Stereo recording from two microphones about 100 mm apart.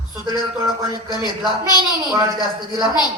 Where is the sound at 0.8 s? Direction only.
45° left (ahead or behind).